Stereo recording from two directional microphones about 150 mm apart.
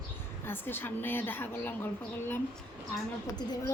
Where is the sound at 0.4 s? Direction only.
15° left (ahead or behind).